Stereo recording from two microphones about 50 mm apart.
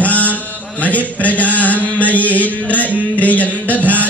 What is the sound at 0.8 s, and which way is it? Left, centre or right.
Chant, left.